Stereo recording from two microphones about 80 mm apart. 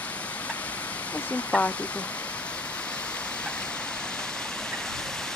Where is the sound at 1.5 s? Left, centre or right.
Centre.